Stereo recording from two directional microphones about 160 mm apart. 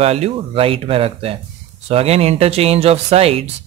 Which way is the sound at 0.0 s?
40° right (ahead or behind).